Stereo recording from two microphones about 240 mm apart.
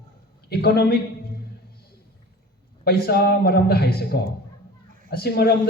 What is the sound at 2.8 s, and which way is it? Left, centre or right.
A man's voice, left.